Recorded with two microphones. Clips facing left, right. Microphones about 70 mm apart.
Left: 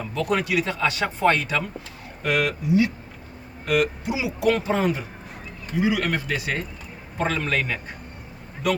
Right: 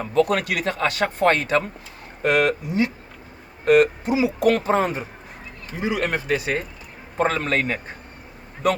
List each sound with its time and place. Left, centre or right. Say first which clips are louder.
0.1 s speech: right 4 dB; right
7.2 s speech: right 3 dB; right